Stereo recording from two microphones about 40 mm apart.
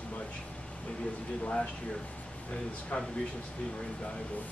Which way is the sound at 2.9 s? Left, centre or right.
Left.